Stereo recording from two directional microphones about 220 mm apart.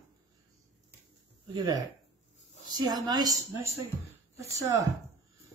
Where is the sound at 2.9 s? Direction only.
15° right (ahead or behind).